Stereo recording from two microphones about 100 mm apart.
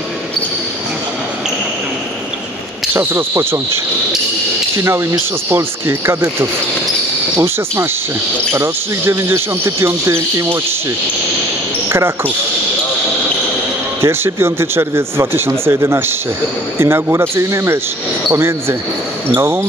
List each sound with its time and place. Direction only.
2.9 s speech: 20° right (ahead or behind)
7.3 s speech: 25° right (ahead or behind)
14.0 s speech: 25° right (ahead or behind)